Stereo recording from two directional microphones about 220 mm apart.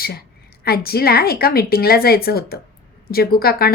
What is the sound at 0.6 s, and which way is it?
A woman's voice, 45° left (ahead or behind).